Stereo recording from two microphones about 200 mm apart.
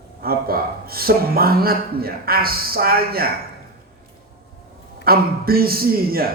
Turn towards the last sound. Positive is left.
turn(degrees=-50)  # may be behind; listen again after turning